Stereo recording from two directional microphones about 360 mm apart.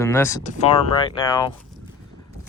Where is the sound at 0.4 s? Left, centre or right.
Centre.